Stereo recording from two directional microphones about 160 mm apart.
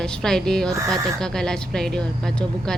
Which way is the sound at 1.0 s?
5° left (ahead or behind).